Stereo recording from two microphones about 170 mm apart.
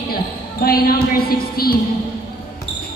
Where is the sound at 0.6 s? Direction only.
60° left (ahead or behind).